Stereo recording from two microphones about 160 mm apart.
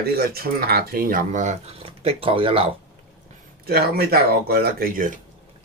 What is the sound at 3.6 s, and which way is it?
Speech, 75° right (ahead or behind).